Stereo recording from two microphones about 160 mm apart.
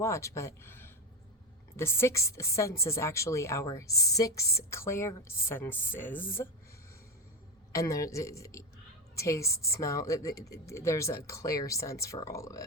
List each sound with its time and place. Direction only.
0.0 s a woman's voice: 20° left (ahead or behind)
7.7 s speech: 20° left (ahead or behind)